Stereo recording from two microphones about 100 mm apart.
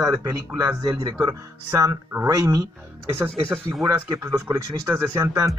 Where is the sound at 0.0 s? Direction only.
40° right (ahead or behind).